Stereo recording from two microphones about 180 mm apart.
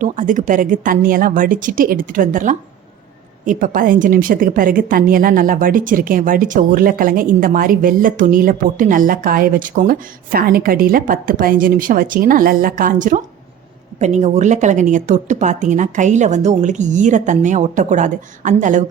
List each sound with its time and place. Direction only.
0.0 s a woman's voice: 45° right (ahead or behind)